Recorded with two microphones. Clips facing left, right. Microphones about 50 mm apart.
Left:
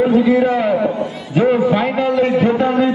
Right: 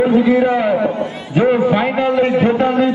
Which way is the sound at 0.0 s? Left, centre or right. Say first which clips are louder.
Even; centre.